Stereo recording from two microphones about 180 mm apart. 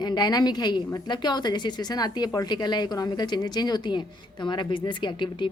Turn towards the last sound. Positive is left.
turn(degrees=25)  # may be behind; listen again after turning